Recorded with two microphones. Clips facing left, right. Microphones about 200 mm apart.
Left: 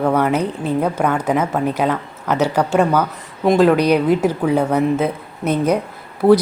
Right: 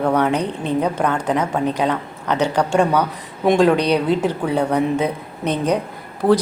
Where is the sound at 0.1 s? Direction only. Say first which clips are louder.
Left 1 dB; 5° left (ahead or behind).